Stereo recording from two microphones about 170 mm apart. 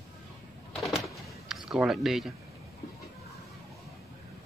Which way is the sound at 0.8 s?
Centre (ahead or behind).